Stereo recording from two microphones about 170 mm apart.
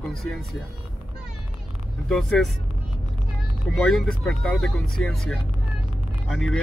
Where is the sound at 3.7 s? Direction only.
Centre (ahead or behind).